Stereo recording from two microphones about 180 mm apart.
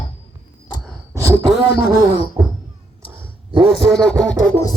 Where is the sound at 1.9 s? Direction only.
20° right (ahead or behind).